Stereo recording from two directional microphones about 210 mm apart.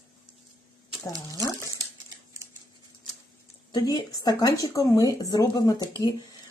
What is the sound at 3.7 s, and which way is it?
Speech, 20° left (ahead or behind).